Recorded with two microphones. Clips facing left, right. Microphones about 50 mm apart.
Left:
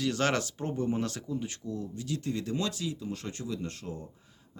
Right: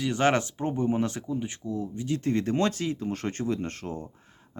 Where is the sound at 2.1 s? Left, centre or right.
Right.